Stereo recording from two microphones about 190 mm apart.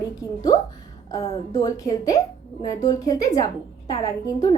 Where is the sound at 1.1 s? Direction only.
20° left (ahead or behind).